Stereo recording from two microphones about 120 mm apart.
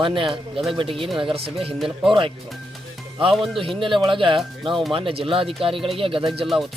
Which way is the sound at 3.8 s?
45° right (ahead or behind).